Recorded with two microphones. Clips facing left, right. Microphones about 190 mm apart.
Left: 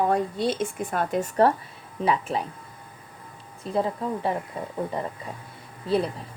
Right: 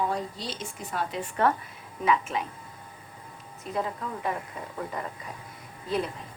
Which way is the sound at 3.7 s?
30° left (ahead or behind).